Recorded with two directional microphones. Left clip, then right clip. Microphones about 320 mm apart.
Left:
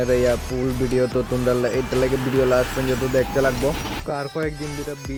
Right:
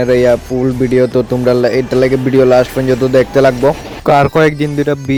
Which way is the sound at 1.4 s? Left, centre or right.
Right.